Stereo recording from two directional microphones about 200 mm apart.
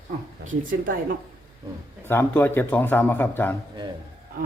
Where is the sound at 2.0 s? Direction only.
10° left (ahead or behind).